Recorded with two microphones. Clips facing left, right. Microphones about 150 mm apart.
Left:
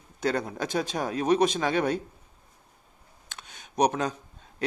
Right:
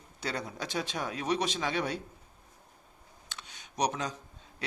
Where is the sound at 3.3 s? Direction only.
50° left (ahead or behind).